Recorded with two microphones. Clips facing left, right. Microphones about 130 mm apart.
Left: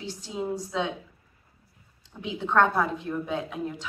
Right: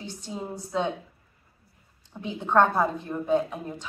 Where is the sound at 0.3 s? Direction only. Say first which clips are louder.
Left 3 dB; 5° left (ahead or behind).